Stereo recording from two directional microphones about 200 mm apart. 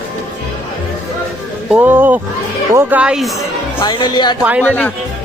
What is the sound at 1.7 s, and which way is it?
Speech, 10° right (ahead or behind).